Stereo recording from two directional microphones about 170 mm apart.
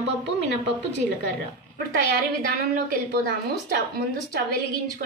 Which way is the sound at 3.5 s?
60° right (ahead or behind).